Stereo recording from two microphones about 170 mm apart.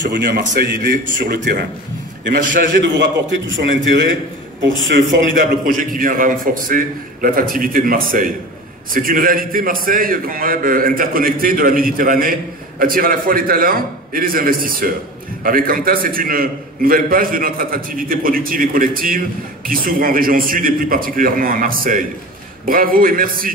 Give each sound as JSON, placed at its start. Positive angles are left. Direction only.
{"t": 0.1, "sound": "a man's voice", "side_deg": -75}
{"t": 2.7, "sound": "a man's voice", "side_deg": -90}
{"t": 5.3, "sound": "a man's voice", "side_deg": -50}